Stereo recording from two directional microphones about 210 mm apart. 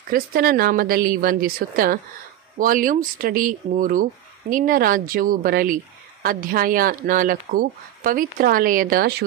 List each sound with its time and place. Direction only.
0.1 s a woman's voice: 45° right (ahead or behind)